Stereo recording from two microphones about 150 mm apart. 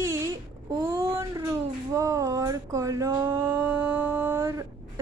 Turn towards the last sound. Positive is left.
turn(degrees=-20)  # may be behind; listen again after turning